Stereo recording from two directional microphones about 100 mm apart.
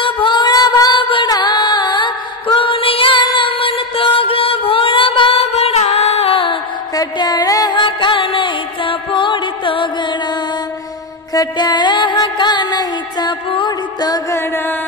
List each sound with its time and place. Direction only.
0.0 s music: 55° left (ahead or behind)
1.0 s music: 55° left (ahead or behind)
7.0 s music: 40° left (ahead or behind)
11.3 s music: 45° left (ahead or behind)